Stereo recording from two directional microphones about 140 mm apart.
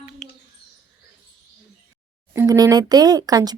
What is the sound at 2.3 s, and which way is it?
Speech, 25° right (ahead or behind).